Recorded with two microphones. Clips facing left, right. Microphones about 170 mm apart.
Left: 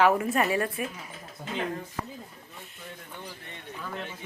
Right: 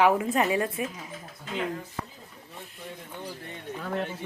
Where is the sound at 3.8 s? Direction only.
55° right (ahead or behind).